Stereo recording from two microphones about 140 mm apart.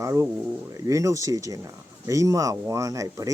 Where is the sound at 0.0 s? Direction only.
20° right (ahead or behind).